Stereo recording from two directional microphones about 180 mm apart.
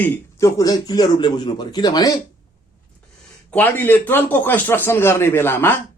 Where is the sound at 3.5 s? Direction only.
10° left (ahead or behind).